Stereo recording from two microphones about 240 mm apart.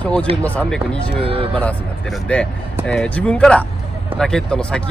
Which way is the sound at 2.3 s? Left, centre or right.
Centre.